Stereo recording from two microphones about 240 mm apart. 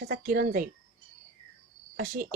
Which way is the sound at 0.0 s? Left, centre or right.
Right.